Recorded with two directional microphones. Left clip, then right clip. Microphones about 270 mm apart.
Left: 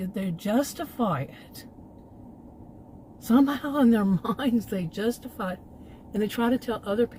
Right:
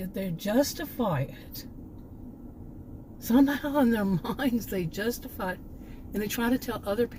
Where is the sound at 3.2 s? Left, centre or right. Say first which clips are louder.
Left 1 dB; left.